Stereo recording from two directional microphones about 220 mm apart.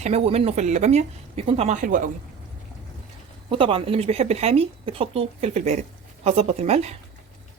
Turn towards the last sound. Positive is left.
turn(degrees=-30)  # may be behind; listen again after turning